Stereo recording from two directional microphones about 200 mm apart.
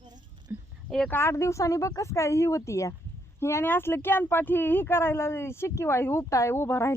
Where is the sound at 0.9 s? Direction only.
5° left (ahead or behind).